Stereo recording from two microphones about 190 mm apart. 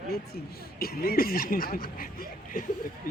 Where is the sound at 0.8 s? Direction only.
55° left (ahead or behind).